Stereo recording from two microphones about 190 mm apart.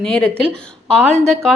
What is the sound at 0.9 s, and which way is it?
Speech, 35° right (ahead or behind).